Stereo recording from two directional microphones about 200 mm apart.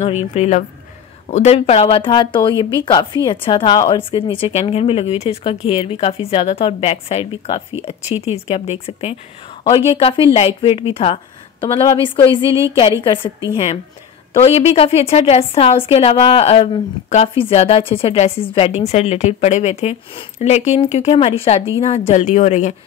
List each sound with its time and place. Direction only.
0.0 s a woman's voice: 30° left (ahead or behind)
12.4 s a woman's voice: 15° right (ahead or behind)
13.0 s speech: 25° left (ahead or behind)
14.4 s a woman's voice: 30° left (ahead or behind)